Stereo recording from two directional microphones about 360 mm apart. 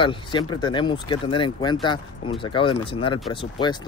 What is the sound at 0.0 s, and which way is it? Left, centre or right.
Speech, centre.